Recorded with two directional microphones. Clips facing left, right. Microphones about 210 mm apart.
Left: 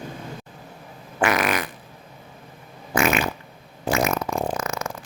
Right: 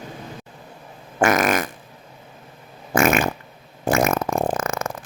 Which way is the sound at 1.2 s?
45° right (ahead or behind).